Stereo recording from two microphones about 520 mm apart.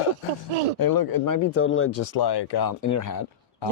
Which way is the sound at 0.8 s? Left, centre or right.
Left.